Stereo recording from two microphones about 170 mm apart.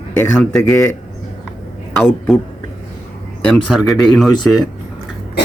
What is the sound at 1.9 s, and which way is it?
Speech, centre (ahead or behind).